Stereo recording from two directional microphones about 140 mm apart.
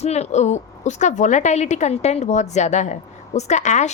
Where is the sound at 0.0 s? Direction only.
50° left (ahead or behind).